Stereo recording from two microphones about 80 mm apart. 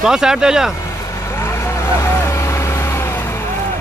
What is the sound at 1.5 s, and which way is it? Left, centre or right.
Vehicle, left.